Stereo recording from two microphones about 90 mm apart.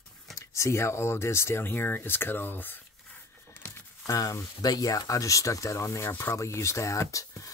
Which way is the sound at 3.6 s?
40° left (ahead or behind).